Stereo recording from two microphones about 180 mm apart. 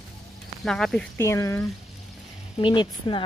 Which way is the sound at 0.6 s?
5° left (ahead or behind).